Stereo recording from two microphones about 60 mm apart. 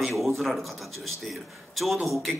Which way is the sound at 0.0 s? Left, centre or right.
Centre.